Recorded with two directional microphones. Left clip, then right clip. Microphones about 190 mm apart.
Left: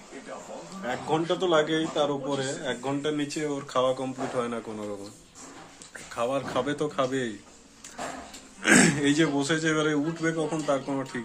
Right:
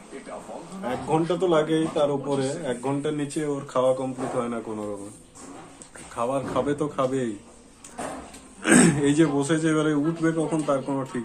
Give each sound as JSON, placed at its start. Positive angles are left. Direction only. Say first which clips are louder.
{"t": 0.8, "sound": "a man's voice", "louder": "right 2 dB", "side_deg": 10}
{"t": 6.1, "sound": "a man's voice", "louder": "right 2 dB", "side_deg": 10}
{"t": 8.6, "sound": "a man's voice", "louder": "right 1 dB", "side_deg": 10}